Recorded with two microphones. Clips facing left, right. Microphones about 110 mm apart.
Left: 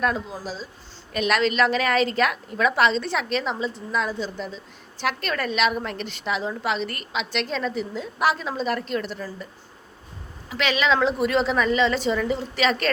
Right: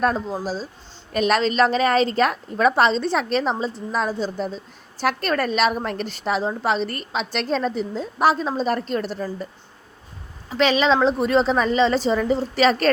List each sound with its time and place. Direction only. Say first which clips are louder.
0.0 s a woman's voice: right 4 dB; 35° right (ahead or behind)
10.5 s a woman's voice: right 4 dB; 30° right (ahead or behind)